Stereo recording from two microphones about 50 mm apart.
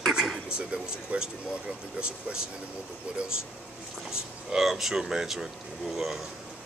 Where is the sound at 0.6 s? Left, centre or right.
Centre.